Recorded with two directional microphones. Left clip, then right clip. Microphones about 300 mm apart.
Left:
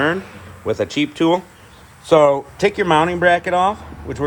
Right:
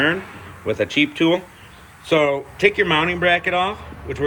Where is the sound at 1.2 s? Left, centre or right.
Centre.